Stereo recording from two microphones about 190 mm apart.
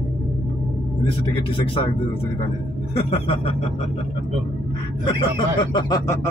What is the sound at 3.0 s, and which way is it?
Speech, 30° left (ahead or behind).